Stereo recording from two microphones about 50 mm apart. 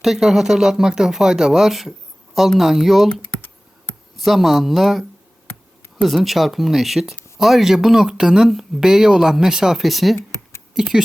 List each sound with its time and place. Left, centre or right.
0.0 s speech: centre
3.1 s computer keyboard: left
4.2 s speech: centre
8.4 s speech: centre
8.8 s speech: centre
10.8 s speech: centre